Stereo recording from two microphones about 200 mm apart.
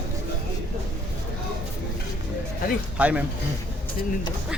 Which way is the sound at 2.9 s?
5° right (ahead or behind).